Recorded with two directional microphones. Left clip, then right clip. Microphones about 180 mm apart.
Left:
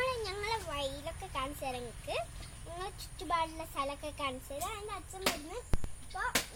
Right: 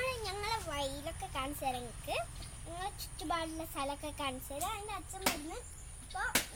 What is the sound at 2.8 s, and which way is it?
A woman's voice, 10° left (ahead or behind).